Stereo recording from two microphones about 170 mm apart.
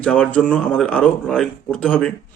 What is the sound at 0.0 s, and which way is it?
Speech, 5° left (ahead or behind).